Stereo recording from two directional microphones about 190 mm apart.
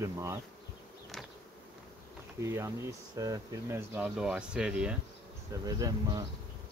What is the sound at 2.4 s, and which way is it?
Speech, 15° right (ahead or behind).